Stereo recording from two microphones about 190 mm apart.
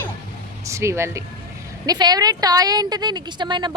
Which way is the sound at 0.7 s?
15° right (ahead or behind).